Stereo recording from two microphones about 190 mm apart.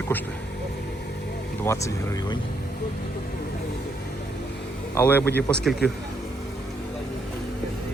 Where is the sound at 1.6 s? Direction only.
15° left (ahead or behind).